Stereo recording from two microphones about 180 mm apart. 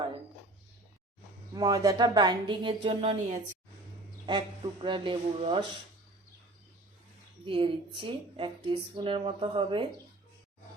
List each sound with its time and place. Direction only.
1.5 s speech: 20° right (ahead or behind); by 3.6 s 40° right (ahead or behind)
4.3 s speech: 25° right (ahead or behind)
7.4 s speech: 30° right (ahead or behind)